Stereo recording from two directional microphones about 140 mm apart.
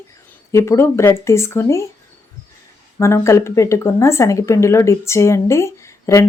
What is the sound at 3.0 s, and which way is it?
Speech, 20° left (ahead or behind).